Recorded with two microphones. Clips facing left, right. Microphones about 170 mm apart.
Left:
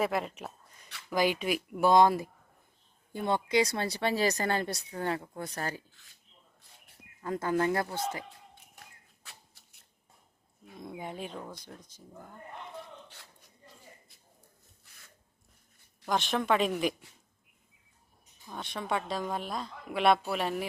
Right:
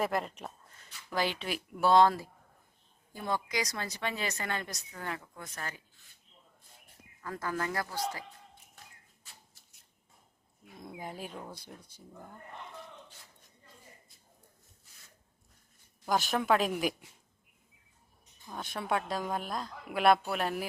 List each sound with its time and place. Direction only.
0.0 s speech: centre (ahead or behind); by 5.8 s 35° left (ahead or behind)
7.2 s speech: 25° left (ahead or behind)
9.2 s a sound: 70° left (ahead or behind)
11.0 s speech: 5° right (ahead or behind)
16.0 s a woman's voice: centre (ahead or behind)
18.4 s a woman's voice: centre (ahead or behind)